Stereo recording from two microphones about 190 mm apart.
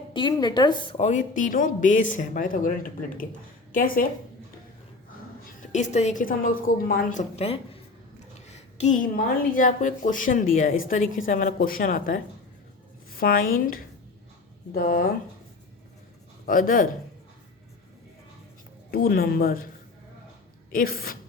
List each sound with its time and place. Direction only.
0.1 s a woman's voice: 25° left (ahead or behind); by 4.0 s 45° left (ahead or behind)
5.7 s a woman's voice: 40° left (ahead or behind)
16.5 s a woman's voice: 45° left (ahead or behind)
18.9 s a woman's voice: 50° left (ahead or behind)
20.7 s a woman's voice: 50° left (ahead or behind)